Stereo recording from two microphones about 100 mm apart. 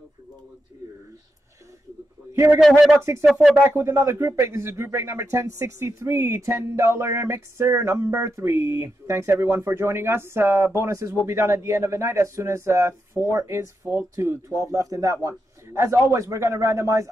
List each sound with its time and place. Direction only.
2.3 s a man's voice: 25° right (ahead or behind)
3.6 s a man's voice: 25° right (ahead or behind)